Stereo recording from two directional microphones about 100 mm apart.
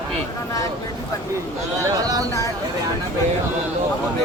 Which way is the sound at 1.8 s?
35° right (ahead or behind).